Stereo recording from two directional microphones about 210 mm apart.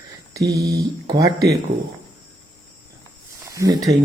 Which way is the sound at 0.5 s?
15° right (ahead or behind).